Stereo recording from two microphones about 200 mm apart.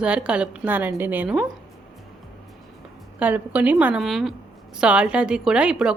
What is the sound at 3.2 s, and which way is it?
A woman's voice, 5° right (ahead or behind).